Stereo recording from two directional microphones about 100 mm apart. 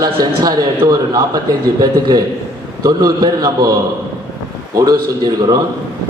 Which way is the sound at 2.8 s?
40° right (ahead or behind).